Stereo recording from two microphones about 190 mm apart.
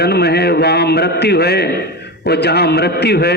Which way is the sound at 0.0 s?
60° left (ahead or behind).